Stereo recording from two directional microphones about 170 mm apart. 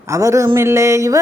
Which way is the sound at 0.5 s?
15° right (ahead or behind).